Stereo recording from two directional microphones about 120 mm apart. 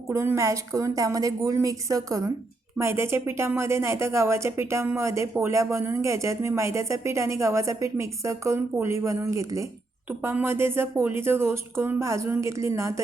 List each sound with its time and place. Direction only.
0.1 s a woman's voice: 20° right (ahead or behind)